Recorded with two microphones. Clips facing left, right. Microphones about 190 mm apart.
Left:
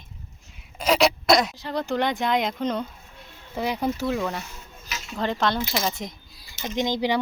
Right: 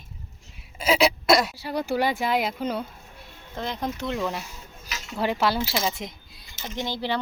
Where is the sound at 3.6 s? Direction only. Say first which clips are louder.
Left 4 dB; 10° left (ahead or behind).